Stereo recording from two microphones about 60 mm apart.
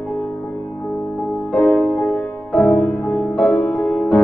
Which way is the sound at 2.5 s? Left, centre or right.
Centre.